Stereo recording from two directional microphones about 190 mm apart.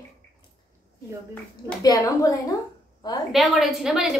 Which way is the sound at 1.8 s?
20° left (ahead or behind).